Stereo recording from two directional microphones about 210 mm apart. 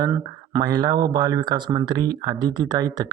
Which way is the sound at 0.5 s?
20° right (ahead or behind).